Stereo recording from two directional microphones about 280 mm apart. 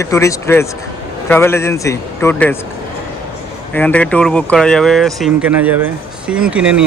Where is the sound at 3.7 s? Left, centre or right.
Centre.